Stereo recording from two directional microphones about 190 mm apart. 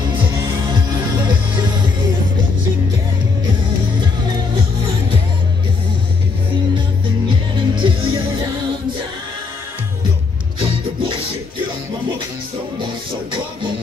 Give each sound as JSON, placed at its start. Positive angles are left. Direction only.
{"t": 7.2, "sound": "music", "side_deg": -25}
{"t": 10.6, "sound": "music", "side_deg": -25}